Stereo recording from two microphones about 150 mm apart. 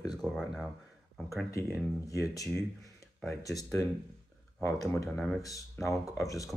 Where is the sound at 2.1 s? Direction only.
20° left (ahead or behind).